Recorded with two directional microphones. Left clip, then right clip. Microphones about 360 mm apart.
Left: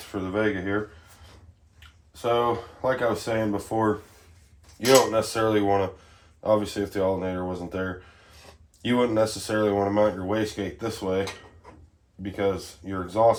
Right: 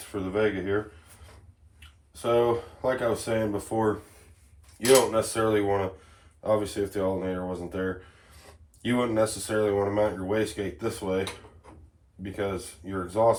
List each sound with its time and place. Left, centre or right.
0.1 s speech: left
2.2 s speech: centre
4.9 s speech: centre
12.2 s speech: centre